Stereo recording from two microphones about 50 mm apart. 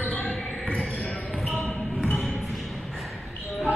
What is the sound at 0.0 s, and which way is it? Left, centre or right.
Basketball bounce, left.